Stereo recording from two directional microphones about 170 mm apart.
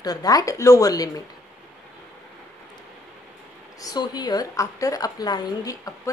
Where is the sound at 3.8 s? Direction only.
25° left (ahead or behind).